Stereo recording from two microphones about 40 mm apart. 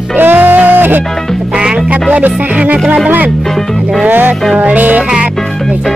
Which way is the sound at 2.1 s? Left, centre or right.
Right.